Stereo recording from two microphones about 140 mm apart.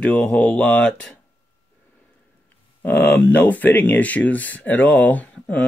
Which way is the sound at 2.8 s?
15° left (ahead or behind).